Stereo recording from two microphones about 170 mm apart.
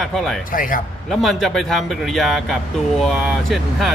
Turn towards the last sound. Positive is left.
turn(degrees=0)  # may be behind; listen again after turning